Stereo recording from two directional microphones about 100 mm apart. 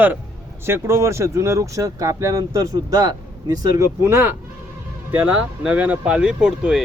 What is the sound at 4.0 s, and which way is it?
Speech, 25° right (ahead or behind).